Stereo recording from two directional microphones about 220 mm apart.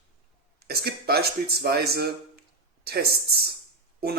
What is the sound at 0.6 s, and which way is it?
Speech, 45° right (ahead or behind).